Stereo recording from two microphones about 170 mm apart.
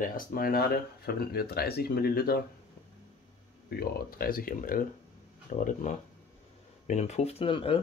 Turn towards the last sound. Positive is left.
turn(degrees=30)  # may be behind; listen again after turning